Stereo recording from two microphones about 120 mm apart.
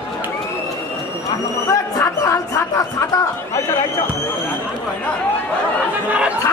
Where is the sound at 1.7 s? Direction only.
25° left (ahead or behind).